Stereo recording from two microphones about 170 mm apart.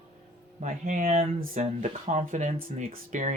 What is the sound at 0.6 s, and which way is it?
Speech, 50° right (ahead or behind).